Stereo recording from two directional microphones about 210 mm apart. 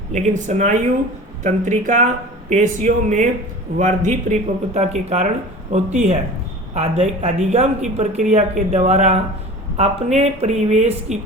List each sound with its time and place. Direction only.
0.1 s speech: 35° right (ahead or behind)